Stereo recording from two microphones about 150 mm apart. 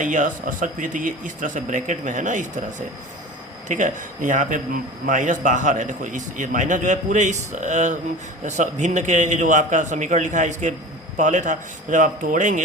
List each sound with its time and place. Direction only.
0.0 s a man's voice: 60° right (ahead or behind)